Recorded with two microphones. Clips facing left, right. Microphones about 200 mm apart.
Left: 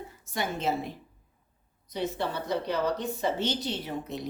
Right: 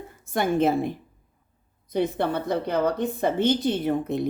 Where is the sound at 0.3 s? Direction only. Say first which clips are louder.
Right 8 dB; 50° right (ahead or behind).